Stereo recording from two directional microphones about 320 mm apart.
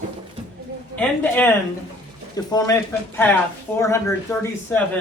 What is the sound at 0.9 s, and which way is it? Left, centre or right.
A man's voice, centre.